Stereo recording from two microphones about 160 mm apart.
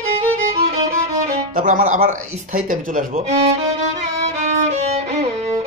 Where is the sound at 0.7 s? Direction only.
50° right (ahead or behind).